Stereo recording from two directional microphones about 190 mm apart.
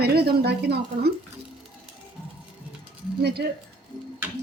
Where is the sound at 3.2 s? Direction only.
55° right (ahead or behind).